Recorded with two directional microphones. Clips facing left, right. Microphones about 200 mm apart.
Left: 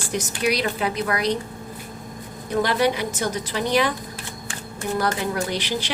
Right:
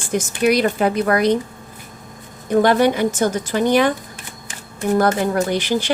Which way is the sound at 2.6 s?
50° right (ahead or behind).